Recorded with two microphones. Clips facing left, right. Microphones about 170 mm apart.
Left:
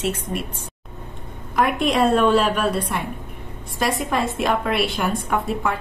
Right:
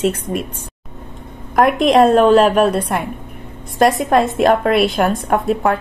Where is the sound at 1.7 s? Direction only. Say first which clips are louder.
Right 7 dB; 90° right.